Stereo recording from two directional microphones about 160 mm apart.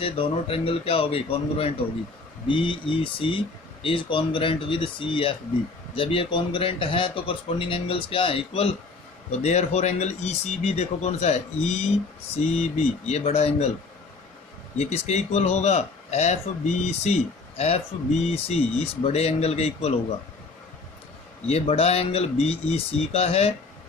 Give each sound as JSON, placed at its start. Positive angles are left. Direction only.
{"t": 0.0, "sound": "a man's voice", "side_deg": 35}
{"t": 14.8, "sound": "a man's voice", "side_deg": 45}
{"t": 21.4, "sound": "a man's voice", "side_deg": 40}